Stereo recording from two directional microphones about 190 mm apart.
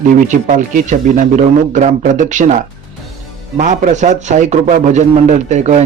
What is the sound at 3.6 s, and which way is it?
A man's voice, 40° right (ahead or behind).